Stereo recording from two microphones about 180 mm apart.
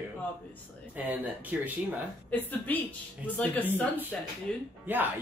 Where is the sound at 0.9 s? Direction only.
10° right (ahead or behind).